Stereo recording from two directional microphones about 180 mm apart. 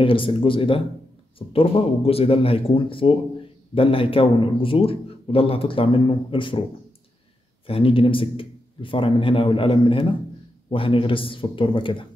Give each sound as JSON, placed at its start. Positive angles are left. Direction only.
{"t": 0.0, "sound": "a man's voice", "side_deg": 30}
{"t": 7.6, "sound": "a man's voice", "side_deg": 30}